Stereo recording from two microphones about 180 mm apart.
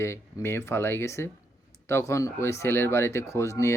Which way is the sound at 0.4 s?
15° left (ahead or behind).